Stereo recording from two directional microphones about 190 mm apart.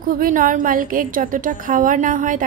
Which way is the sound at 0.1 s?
45° right (ahead or behind).